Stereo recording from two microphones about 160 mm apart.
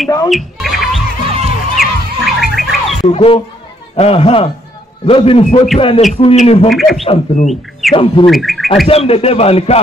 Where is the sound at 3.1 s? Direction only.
35° left (ahead or behind).